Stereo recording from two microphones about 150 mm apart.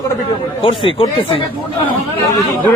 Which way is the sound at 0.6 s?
35° left (ahead or behind).